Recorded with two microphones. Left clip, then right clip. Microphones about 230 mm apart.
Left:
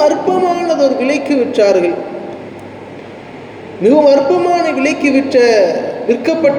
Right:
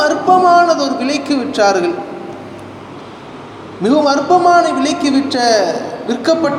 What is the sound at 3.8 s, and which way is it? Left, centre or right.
Speech, right.